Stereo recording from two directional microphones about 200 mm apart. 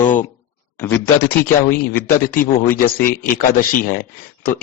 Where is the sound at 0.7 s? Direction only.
10° left (ahead or behind).